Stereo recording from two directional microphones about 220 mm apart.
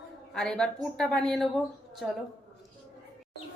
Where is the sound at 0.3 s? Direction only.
5° left (ahead or behind).